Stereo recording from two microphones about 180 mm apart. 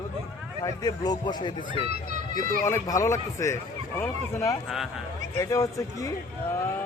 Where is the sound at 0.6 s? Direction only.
20° left (ahead or behind).